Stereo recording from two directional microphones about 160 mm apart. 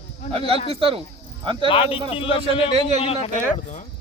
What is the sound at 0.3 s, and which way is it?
Speech, 35° right (ahead or behind).